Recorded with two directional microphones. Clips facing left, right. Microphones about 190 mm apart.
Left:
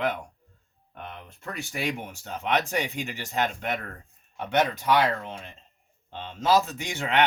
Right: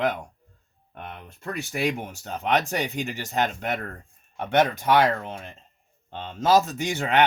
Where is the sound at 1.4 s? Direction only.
40° right (ahead or behind).